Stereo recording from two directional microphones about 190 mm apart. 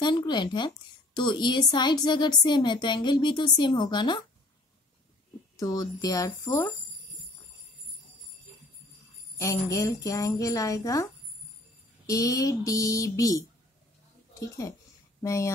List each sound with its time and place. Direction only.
0.0 s a sound: 25° left (ahead or behind)
1.1 s a woman's voice: 25° left (ahead or behind)
5.6 s a woman's voice: 20° left (ahead or behind)
9.4 s speech: 15° left (ahead or behind)
12.1 s speech: 20° left (ahead or behind)
15.2 s speech: 15° left (ahead or behind)